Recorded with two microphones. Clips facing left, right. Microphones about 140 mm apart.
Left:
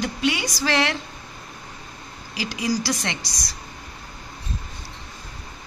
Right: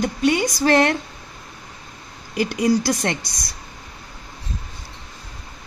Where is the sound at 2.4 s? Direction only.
55° right (ahead or behind).